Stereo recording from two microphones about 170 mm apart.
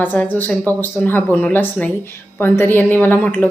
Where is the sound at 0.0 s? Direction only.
10° left (ahead or behind).